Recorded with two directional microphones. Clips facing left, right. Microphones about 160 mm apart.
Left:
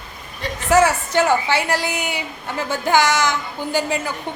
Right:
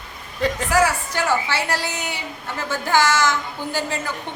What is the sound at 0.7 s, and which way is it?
A woman's voice, 25° left (ahead or behind).